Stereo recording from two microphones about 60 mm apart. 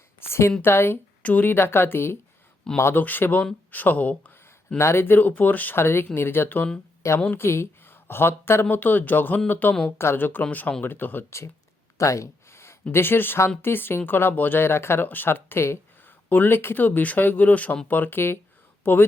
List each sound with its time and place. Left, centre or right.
0.2 s a woman's voice: left
1.2 s speech: left
1.5 s speech: left
4.8 s speech: left
7.3 s a woman's voice: left
8.7 s speech: left
11.9 s a sound: left
12.9 s speech: left
16.0 s speech: left